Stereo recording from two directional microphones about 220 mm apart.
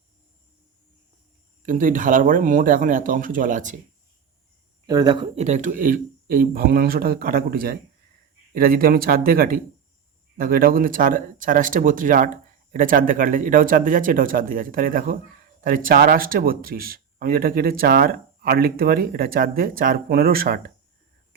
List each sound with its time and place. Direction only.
1.6 s speech: 35° right (ahead or behind)
4.9 s speech: 20° right (ahead or behind); by 20.6 s 40° right (ahead or behind)